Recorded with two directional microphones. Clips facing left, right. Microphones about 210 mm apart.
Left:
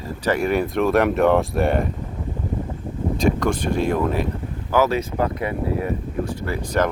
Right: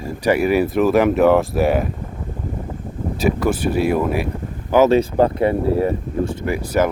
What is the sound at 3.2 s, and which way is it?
Speech, 5° right (ahead or behind).